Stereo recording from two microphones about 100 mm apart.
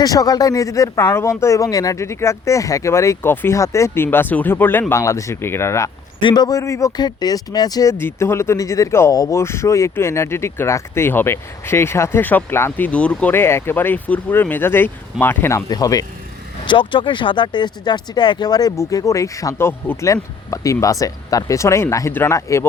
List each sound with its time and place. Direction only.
0.0 s speech: 40° left (ahead or behind)
6.1 s speech: 50° left (ahead or behind)
6.6 s speech: 30° left (ahead or behind)
7.9 s speech: 25° left (ahead or behind)
9.4 s speech: 25° left (ahead or behind); by 13.3 s 10° left (ahead or behind)
13.3 s speech: 25° left (ahead or behind)
15.7 s speech: 35° left (ahead or behind)
16.6 s speech: 55° left (ahead or behind); by 22.6 s 30° left (ahead or behind)